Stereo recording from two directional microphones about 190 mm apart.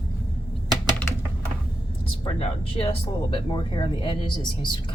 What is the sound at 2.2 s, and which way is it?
Speech, 30° left (ahead or behind).